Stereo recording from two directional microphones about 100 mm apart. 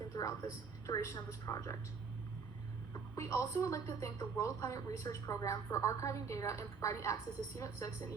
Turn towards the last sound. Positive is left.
turn(degrees=30)  # may be behind; listen again after turning